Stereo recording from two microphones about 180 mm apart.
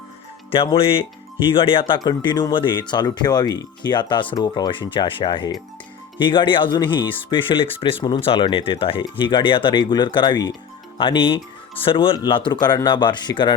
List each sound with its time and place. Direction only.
0.5 s speech: 30° left (ahead or behind)